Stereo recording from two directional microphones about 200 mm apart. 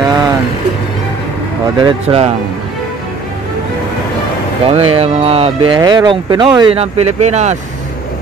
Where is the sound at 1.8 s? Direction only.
30° right (ahead or behind).